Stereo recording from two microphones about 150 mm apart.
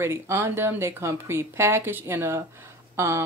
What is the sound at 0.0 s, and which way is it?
Speech, 15° right (ahead or behind).